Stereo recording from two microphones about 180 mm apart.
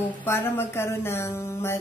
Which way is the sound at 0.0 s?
15° left (ahead or behind).